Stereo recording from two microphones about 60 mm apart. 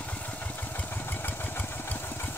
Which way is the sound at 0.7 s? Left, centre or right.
Left.